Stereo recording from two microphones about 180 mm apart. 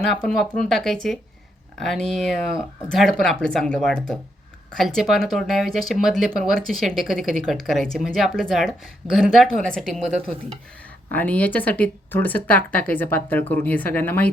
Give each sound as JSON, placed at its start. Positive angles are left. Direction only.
{"t": 0.1, "sound": "speech", "side_deg": 0}
{"t": 11.1, "sound": "speech", "side_deg": 10}